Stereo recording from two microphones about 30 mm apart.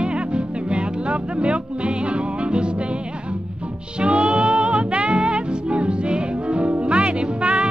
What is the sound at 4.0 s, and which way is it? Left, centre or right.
Music, right.